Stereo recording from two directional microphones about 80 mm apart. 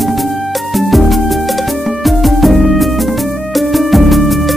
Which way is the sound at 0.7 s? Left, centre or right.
Centre.